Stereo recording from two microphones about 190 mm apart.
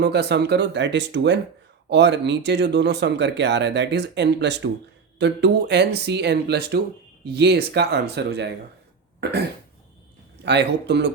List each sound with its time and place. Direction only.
0.0 s speech: 60° right (ahead or behind)
10.4 s speech: 65° right (ahead or behind)